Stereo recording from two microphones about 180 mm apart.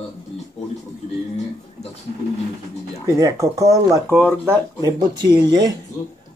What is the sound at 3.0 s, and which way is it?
A man's voice, 20° right (ahead or behind).